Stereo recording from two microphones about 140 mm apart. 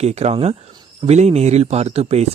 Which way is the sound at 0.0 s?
50° right (ahead or behind).